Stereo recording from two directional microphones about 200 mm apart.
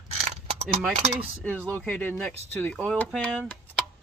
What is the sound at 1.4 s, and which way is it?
Speech, 5° left (ahead or behind).